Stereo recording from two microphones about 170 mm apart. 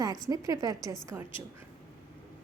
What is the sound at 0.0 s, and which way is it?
Speech, 20° right (ahead or behind).